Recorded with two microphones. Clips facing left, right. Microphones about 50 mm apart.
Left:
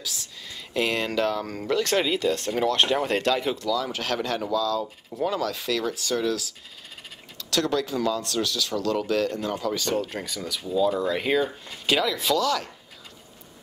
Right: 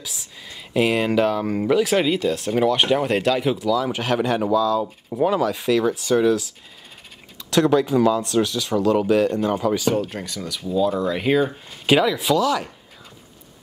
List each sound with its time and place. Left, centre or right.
0.0 s speech: centre
7.5 s speech: centre
11.8 s speech: centre